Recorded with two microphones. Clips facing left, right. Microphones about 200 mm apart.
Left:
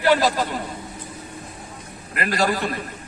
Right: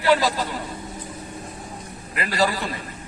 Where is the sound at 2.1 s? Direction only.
50° left (ahead or behind).